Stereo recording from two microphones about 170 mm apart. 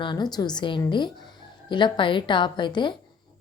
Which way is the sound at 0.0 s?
25° left (ahead or behind).